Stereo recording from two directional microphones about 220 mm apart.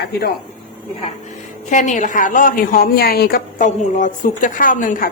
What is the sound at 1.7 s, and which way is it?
A woman's voice, 35° left (ahead or behind).